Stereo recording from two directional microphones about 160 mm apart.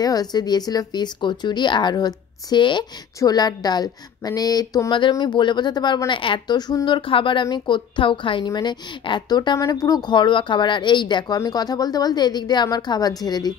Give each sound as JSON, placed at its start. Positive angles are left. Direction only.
{"t": 0.0, "sound": "speech", "side_deg": 25}